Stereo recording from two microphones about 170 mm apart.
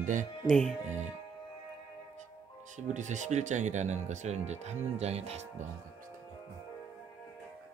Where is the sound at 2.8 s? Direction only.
45° right (ahead or behind).